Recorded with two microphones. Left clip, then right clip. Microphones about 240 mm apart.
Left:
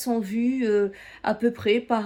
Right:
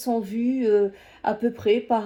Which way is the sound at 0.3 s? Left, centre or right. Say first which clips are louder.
Right 4 dB; left.